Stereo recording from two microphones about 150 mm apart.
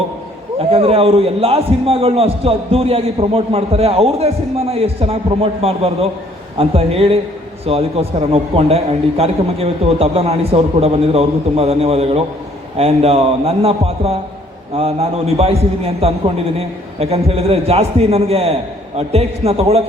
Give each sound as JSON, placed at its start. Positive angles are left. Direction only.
{"t": 0.6, "sound": "a man's voice", "side_deg": -40}